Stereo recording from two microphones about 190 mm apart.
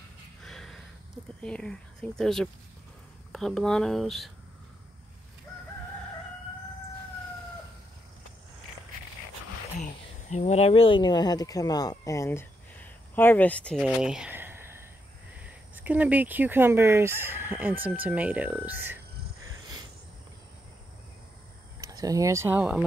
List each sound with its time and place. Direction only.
0.4 s a sound: centre (ahead or behind)
1.4 s speech: 5° left (ahead or behind)
10.3 s speech: 35° left (ahead or behind); by 18.9 s 10° right (ahead or behind)
21.8 s speech: 20° right (ahead or behind)